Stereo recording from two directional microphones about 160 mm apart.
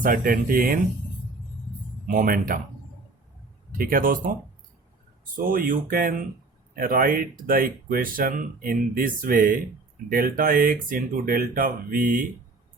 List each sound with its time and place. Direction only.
0.0 s speech: 60° right (ahead or behind)
2.0 s speech: 60° right (ahead or behind)
3.7 s speech: 60° right (ahead or behind)
5.4 s speech: 60° right (ahead or behind)